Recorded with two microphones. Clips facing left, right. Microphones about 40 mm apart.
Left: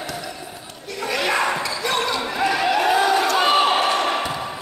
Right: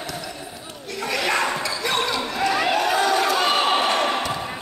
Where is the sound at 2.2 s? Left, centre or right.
Centre.